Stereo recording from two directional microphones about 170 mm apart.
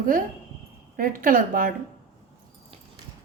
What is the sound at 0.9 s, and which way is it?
Speech, 55° right (ahead or behind).